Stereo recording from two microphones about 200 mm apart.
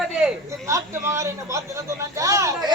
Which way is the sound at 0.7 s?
15° right (ahead or behind).